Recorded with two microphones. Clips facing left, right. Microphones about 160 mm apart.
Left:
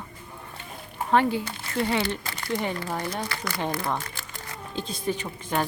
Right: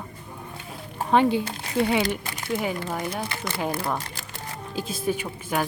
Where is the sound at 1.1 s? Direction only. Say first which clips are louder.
Right 2 dB; 20° right (ahead or behind).